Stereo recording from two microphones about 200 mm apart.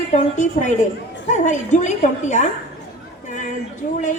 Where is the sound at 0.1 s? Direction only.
35° left (ahead or behind).